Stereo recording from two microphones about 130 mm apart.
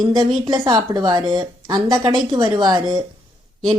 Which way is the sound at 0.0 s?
35° right (ahead or behind).